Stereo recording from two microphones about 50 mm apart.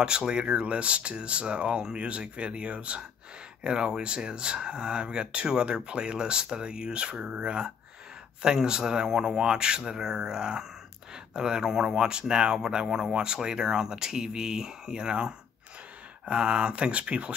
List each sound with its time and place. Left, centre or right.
0.0 s speech: centre